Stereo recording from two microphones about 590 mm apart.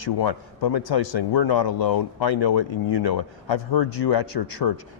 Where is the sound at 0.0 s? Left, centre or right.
Left.